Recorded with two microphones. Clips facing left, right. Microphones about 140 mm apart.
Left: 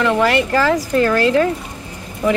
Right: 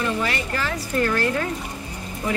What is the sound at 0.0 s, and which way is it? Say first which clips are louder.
Speech: left 9 dB; 75° left (ahead or behind).